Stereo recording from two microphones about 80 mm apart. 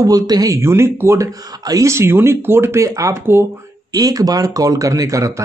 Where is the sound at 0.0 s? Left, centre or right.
Right.